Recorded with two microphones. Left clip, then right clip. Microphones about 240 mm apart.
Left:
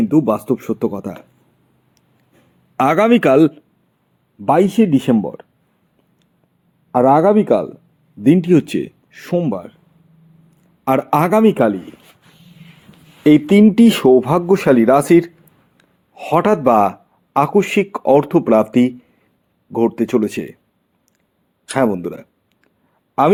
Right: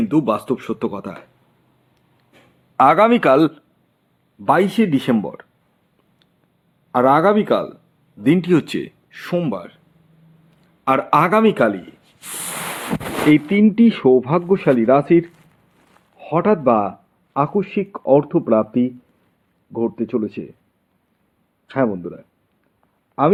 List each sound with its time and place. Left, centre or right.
0.0 s speech: left
2.7 s speech: centre
6.9 s speech: centre
10.8 s speech: left
13.2 s speech: left
21.7 s speech: left